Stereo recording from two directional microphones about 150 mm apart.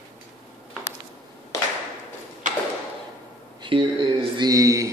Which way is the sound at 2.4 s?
60° right (ahead or behind).